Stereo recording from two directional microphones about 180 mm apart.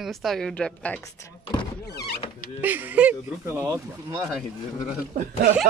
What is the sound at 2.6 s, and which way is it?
Speech, 10° right (ahead or behind).